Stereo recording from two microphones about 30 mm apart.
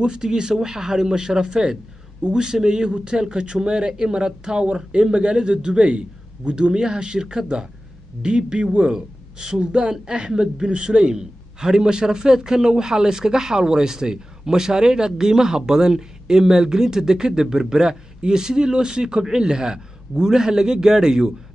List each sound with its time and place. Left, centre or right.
0.0 s a man's voice: right